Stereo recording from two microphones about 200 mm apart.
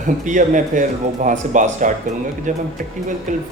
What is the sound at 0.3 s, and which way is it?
Speech, 40° right (ahead or behind).